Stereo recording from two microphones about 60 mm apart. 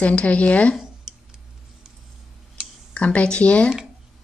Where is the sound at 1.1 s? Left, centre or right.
Centre.